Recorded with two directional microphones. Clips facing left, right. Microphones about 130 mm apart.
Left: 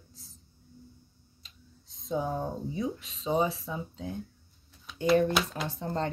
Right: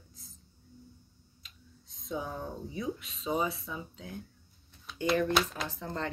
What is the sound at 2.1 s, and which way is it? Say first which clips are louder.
Speech: left 6 dB; 30° left (ahead or behind).